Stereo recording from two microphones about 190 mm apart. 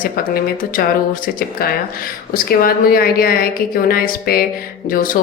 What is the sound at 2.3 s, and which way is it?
A woman's voice, 50° left (ahead or behind).